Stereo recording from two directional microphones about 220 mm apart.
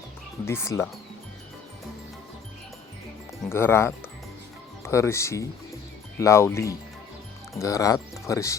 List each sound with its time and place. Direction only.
0.4 s speech: 10° left (ahead or behind)
3.5 s speech: 10° left (ahead or behind)